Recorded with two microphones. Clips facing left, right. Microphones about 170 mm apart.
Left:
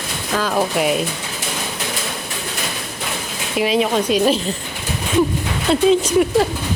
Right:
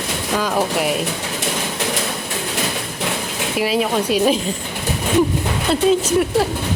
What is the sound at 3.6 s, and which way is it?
Speech, 5° right (ahead or behind).